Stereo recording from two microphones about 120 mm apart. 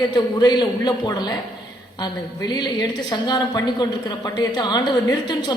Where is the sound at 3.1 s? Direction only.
35° left (ahead or behind).